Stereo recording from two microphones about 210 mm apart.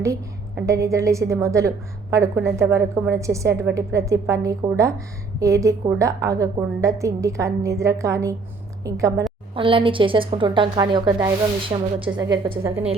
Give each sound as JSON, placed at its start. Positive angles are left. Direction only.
{"t": 0.0, "sound": "a woman's voice", "side_deg": -15}